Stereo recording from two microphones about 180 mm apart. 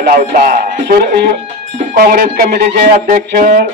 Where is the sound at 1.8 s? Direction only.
50° right (ahead or behind).